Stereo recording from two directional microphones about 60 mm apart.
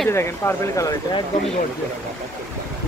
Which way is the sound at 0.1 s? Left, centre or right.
Left.